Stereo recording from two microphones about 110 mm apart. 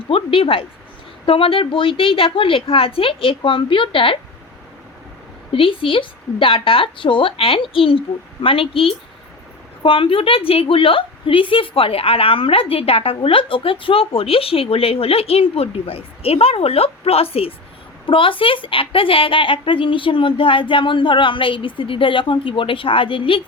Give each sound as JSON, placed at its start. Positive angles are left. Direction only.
{"t": 0.1, "sound": "a woman's voice", "side_deg": 55}
{"t": 5.5, "sound": "a woman's voice", "side_deg": 55}